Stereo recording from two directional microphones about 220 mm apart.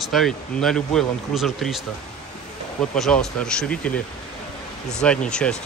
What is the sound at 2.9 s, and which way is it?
Speech, 5° left (ahead or behind).